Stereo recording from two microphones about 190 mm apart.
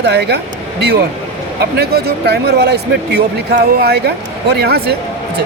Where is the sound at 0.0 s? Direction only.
60° right (ahead or behind).